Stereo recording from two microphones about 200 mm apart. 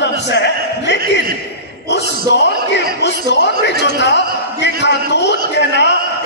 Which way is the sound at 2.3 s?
60° left (ahead or behind).